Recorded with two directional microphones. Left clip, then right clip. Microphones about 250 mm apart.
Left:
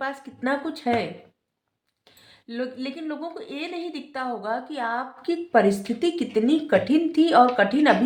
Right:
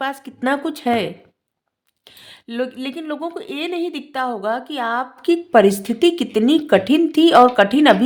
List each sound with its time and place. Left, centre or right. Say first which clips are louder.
0.0 s speech: right 6 dB; right
2.0 s speech: right 7 dB; right